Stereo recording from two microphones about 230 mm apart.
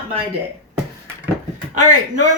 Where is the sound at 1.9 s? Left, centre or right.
Right.